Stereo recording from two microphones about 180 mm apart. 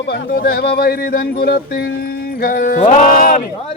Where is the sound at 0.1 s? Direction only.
55° left (ahead or behind).